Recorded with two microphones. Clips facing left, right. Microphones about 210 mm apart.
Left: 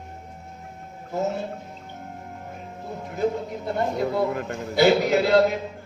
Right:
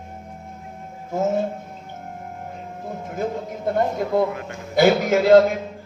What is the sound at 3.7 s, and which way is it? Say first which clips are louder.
A man's voice: right 3 dB; 50° right (ahead or behind).